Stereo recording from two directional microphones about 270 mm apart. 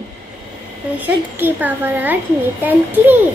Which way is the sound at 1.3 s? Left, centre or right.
Centre.